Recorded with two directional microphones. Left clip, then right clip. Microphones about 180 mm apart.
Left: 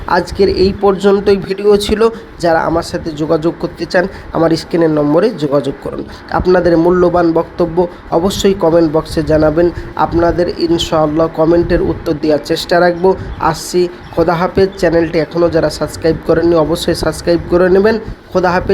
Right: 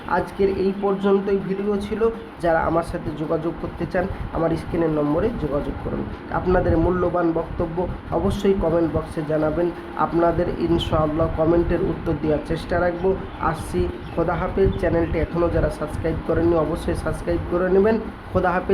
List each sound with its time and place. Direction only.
0.1 s speech: 35° left (ahead or behind)
17.7 s speech: 25° left (ahead or behind)